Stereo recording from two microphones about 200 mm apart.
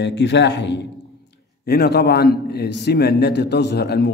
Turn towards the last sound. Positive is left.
turn(degrees=55)  # may be behind; listen again after turning